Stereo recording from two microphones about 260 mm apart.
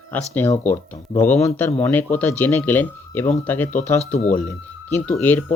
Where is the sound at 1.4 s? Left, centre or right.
Centre.